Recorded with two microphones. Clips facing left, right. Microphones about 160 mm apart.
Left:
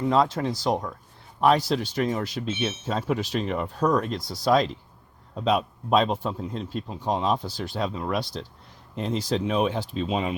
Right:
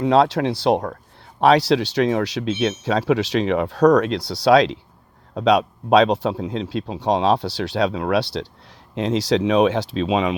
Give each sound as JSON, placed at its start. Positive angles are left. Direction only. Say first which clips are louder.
{"t": 0.0, "sound": "speech", "louder": "right 6 dB", "side_deg": -75}
{"t": 1.4, "sound": "speech", "louder": "right 6 dB", "side_deg": -80}